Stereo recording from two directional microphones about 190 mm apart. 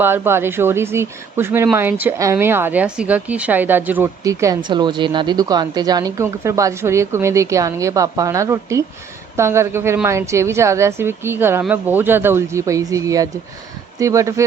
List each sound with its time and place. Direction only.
0.0 s speech: 10° right (ahead or behind)